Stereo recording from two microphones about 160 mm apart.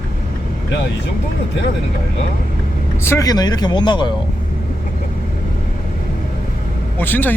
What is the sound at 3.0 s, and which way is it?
Speech, 20° left (ahead or behind).